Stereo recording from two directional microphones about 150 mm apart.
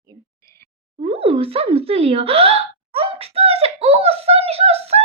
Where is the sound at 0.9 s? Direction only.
40° right (ahead or behind).